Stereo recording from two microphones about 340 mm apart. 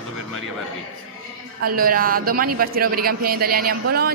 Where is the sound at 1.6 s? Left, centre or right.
Right.